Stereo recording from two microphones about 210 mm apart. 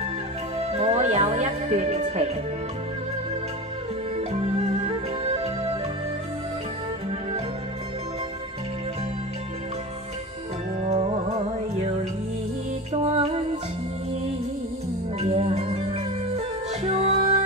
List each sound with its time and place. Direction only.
0.6 s music: 30° right (ahead or behind)
4.3 s music: 30° right (ahead or behind)
10.8 s music: 30° right (ahead or behind)
13.0 s music: 30° right (ahead or behind)
15.1 s music: 30° right (ahead or behind)